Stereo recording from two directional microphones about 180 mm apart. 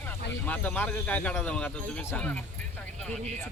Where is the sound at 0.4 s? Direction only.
10° left (ahead or behind).